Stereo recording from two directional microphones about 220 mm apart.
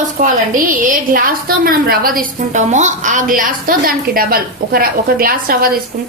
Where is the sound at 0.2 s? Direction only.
40° right (ahead or behind).